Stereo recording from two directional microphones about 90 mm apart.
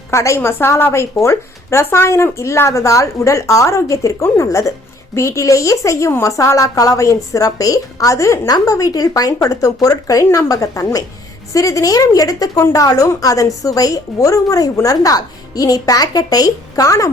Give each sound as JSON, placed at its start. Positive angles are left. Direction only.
{"t": 0.1, "sound": "a woman's voice", "side_deg": 35}